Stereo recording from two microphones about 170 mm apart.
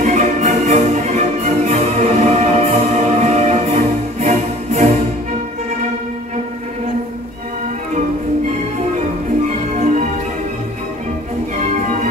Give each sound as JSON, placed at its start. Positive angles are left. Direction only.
{"t": 0.0, "sound": "music", "side_deg": -45}